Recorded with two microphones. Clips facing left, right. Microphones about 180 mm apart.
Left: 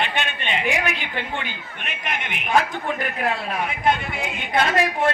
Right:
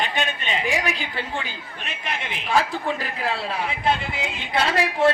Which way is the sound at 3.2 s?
30° right (ahead or behind).